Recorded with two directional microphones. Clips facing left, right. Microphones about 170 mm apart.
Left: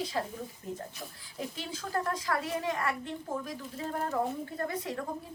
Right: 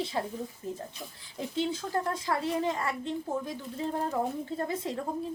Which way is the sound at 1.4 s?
25° right (ahead or behind).